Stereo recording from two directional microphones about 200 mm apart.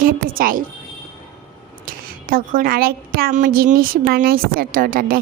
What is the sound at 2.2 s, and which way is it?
A woman's voice, 45° right (ahead or behind).